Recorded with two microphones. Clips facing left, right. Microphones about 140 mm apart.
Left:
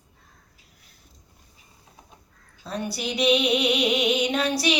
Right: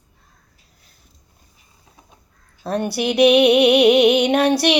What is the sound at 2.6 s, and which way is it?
Music, 65° right (ahead or behind).